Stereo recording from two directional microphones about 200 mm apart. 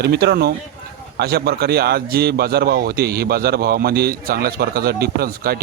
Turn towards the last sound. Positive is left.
turn(degrees=-50)  # may be behind; listen again after turning